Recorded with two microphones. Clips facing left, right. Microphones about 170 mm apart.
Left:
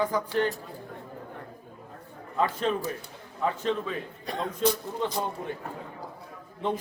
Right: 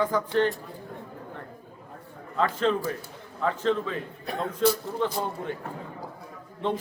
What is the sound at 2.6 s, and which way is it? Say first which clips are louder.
A man's voice: right 3 dB; 15° left (ahead or behind).